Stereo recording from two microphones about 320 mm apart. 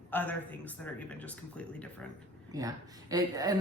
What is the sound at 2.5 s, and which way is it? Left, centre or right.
Speech, centre.